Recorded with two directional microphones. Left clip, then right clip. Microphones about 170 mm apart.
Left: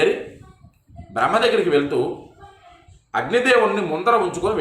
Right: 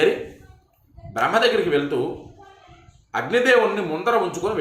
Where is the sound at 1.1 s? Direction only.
10° left (ahead or behind).